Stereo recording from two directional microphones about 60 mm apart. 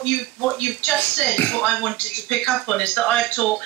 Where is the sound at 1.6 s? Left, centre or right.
Centre.